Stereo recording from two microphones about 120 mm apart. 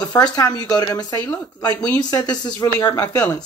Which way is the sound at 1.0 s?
15° left (ahead or behind).